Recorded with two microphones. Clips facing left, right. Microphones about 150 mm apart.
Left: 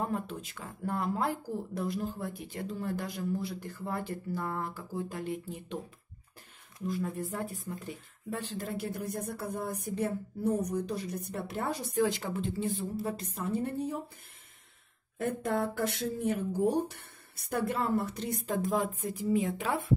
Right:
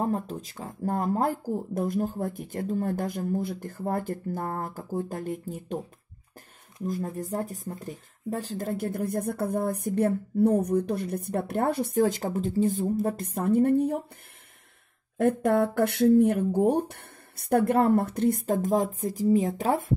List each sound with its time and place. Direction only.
0.0 s speech: 40° right (ahead or behind)
6.9 s speech: 40° right (ahead or behind)
12.0 s speech: 45° right (ahead or behind); by 14.0 s 60° right (ahead or behind)
15.1 s speech: 60° right (ahead or behind); by 19.9 s 40° right (ahead or behind)